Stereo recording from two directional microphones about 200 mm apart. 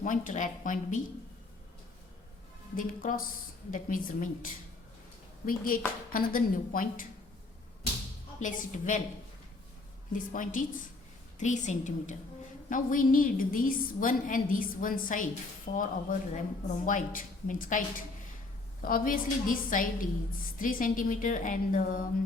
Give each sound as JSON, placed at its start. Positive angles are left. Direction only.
{"t": 0.0, "sound": "a woman's voice", "side_deg": 40}
{"t": 2.7, "sound": "a woman's voice", "side_deg": 40}
{"t": 8.4, "sound": "a woman's voice", "side_deg": 40}
{"t": 10.1, "sound": "a woman's voice", "side_deg": 40}